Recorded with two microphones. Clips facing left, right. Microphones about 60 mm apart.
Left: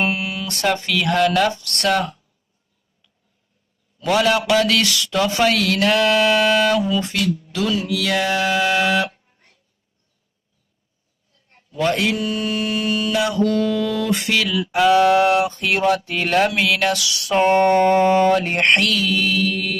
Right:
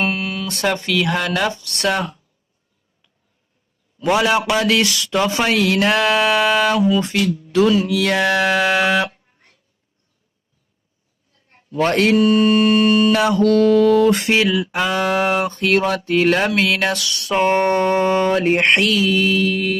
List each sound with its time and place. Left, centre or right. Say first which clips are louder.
0.0 s speech: right 1 dB; centre
4.0 s a man's voice: right 1 dB; centre
7.5 s mantra: right 6 dB; right
11.8 s mantra: right 5 dB; right
13.4 s mantra: right 9 dB; right
14.6 s mantra: left 5 dB; centre
15.4 s a sound: right 4 dB; centre
16.0 s a sound: right 2 dB; centre
17.5 s mantra: left 3 dB; centre